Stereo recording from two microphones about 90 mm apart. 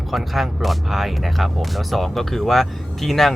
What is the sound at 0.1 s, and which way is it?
Speech, centre (ahead or behind).